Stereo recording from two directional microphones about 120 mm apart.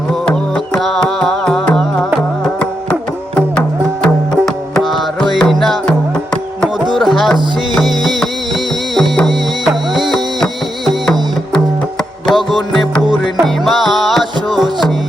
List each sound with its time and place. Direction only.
0.1 s music: 5° left (ahead or behind)
6.9 s music: centre (ahead or behind)
12.3 s music: centre (ahead or behind)